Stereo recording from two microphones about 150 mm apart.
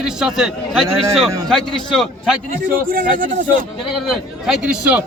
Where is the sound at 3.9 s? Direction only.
Centre (ahead or behind).